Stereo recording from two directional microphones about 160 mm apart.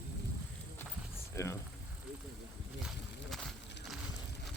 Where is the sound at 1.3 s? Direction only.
15° left (ahead or behind).